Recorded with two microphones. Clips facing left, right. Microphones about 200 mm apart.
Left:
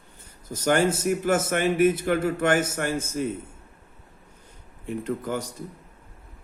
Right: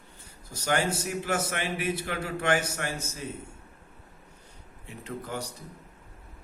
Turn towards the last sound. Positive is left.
turn(degrees=50)  # may be behind; listen again after turning